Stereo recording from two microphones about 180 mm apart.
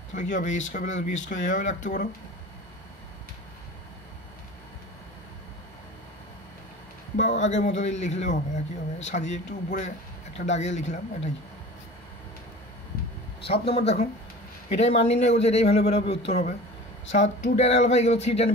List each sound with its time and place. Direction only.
0.1 s speech: 45° left (ahead or behind)
7.2 s speech: 40° left (ahead or behind)
13.5 s speech: 35° left (ahead or behind)